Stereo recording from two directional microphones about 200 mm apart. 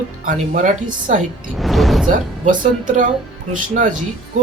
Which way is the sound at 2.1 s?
40° right (ahead or behind).